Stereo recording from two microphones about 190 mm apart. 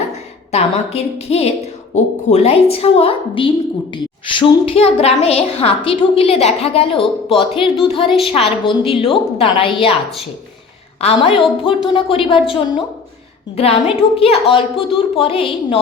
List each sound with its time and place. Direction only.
0.5 s a woman's voice: 35° left (ahead or behind)
11.0 s a woman's voice: 30° left (ahead or behind)